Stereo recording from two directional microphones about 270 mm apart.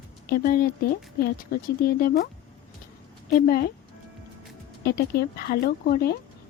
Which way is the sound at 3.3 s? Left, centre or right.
Left.